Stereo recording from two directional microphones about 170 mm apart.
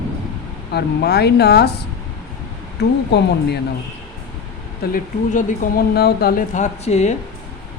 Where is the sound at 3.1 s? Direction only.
75° left (ahead or behind).